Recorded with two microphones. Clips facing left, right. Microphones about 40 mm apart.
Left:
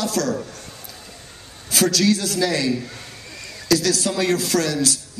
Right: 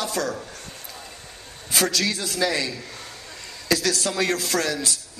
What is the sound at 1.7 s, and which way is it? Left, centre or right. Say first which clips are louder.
A man's voice: left 5 dB; centre.